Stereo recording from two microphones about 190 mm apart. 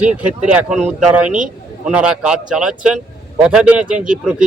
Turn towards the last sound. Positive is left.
turn(degrees=-5)  # may be behind; listen again after turning